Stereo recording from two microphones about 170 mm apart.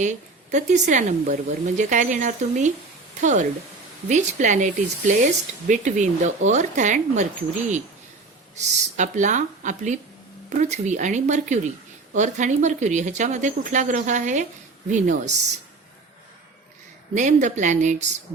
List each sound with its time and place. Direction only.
0.0 s speech: 45° right (ahead or behind)
8.5 s speech: 45° right (ahead or behind)
17.2 s speech: 45° right (ahead or behind)